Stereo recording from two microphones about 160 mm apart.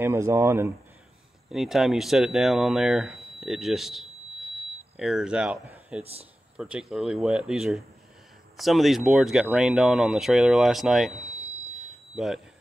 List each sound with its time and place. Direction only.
0.0 s speech: 20° right (ahead or behind)
1.5 s speech: centre (ahead or behind)